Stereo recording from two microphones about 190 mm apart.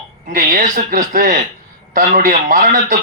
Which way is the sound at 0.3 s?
45° right (ahead or behind).